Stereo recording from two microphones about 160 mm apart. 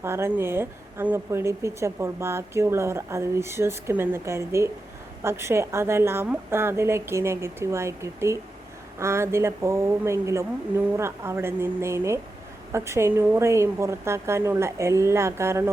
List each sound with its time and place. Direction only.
0.0 s a woman's voice: 15° right (ahead or behind)